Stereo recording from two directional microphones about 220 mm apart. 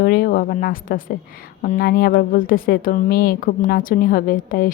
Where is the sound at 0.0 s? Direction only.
45° left (ahead or behind).